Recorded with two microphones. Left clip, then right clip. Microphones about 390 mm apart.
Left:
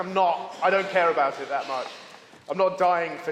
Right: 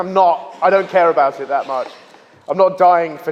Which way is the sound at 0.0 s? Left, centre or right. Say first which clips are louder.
Right 9 dB; right.